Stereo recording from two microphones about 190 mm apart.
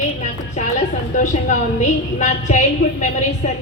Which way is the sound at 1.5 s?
40° left (ahead or behind).